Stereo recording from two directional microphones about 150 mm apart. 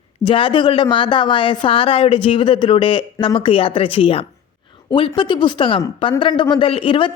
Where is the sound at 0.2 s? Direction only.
35° left (ahead or behind).